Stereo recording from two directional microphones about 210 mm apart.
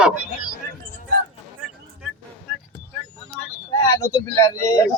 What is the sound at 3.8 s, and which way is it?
Speech, 15° left (ahead or behind).